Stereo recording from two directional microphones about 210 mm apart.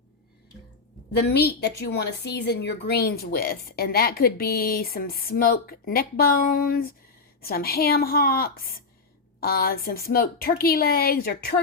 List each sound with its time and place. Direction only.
1.1 s a woman's voice: 50° left (ahead or behind)